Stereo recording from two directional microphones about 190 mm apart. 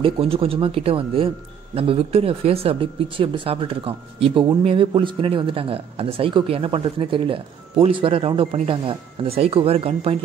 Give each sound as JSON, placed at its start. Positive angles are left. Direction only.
{"t": 0.0, "sound": "speech", "side_deg": -30}